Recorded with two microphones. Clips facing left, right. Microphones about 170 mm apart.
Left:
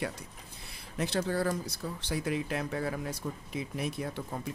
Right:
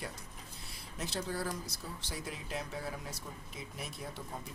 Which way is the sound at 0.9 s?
65° left (ahead or behind).